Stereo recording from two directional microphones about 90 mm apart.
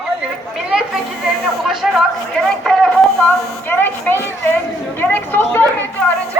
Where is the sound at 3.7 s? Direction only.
20° left (ahead or behind).